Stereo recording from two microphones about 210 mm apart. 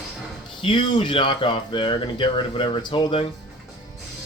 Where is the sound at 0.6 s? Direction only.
25° left (ahead or behind).